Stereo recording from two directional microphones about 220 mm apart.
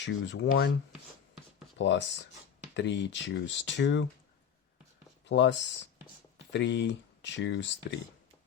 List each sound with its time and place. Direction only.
0.0 s speech: 55° left (ahead or behind)
1.8 s speech: 55° left (ahead or behind)
5.2 s speech: 55° left (ahead or behind)